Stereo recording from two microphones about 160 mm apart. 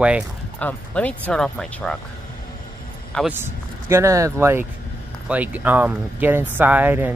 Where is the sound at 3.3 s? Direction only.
15° right (ahead or behind).